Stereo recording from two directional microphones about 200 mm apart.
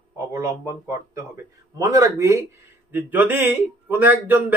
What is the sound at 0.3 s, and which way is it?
Speech, 15° right (ahead or behind).